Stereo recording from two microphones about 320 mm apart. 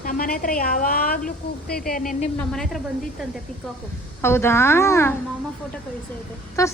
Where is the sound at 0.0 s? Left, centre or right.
Left.